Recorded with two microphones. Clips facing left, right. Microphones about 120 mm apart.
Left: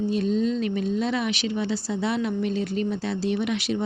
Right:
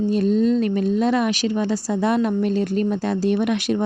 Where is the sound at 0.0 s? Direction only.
45° right (ahead or behind).